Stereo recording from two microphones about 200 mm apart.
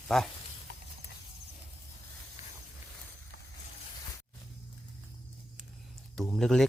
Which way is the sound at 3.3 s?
45° left (ahead or behind).